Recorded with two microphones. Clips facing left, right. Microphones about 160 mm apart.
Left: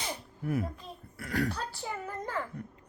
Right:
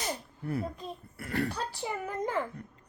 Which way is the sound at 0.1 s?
10° left (ahead or behind).